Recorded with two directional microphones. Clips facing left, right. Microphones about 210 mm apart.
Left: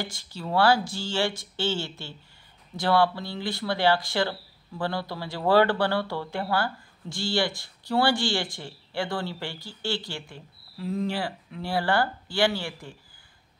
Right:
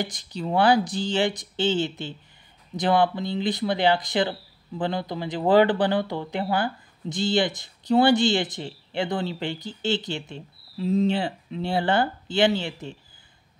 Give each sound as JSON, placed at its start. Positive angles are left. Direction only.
{"t": 0.0, "sound": "speech", "side_deg": -20}